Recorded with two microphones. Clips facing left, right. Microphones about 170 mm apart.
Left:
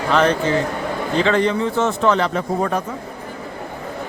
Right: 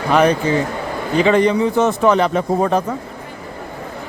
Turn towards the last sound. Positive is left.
turn(degrees=-20)  # may be behind; listen again after turning